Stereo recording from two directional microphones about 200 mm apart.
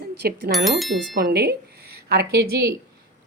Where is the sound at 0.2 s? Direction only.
50° right (ahead or behind).